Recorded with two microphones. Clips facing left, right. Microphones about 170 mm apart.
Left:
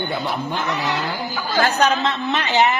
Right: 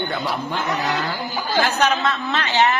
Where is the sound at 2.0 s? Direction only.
20° left (ahead or behind).